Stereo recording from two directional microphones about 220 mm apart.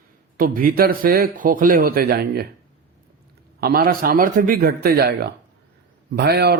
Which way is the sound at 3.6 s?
40° right (ahead or behind).